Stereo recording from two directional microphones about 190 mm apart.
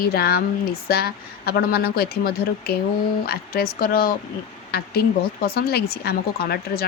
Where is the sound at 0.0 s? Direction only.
55° left (ahead or behind).